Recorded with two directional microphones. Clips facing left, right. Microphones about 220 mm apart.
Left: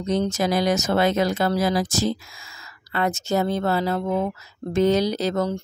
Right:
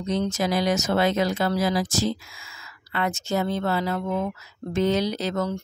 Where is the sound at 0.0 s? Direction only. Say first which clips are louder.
Left 2 dB; 40° left (ahead or behind).